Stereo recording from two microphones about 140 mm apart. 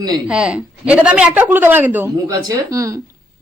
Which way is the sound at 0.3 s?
5° right (ahead or behind).